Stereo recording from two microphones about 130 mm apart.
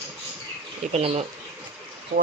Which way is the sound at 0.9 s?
55° right (ahead or behind).